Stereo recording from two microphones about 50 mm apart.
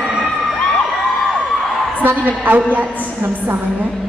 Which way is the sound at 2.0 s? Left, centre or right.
Right.